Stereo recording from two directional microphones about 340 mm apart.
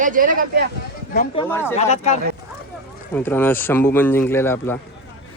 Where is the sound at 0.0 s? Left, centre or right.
Right.